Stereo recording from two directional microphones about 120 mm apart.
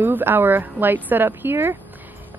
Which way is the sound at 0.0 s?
15° right (ahead or behind).